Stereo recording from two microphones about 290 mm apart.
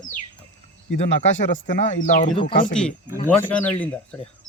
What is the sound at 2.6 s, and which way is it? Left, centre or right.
Speech, centre.